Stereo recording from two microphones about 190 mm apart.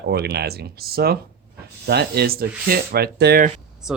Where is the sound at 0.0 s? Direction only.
60° right (ahead or behind).